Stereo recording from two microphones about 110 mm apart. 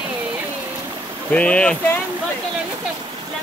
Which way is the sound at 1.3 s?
10° left (ahead or behind).